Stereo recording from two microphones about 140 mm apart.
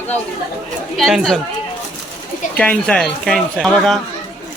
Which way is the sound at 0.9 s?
Centre (ahead or behind).